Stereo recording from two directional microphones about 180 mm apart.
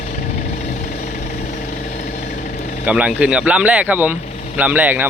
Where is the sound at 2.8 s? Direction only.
5° right (ahead or behind).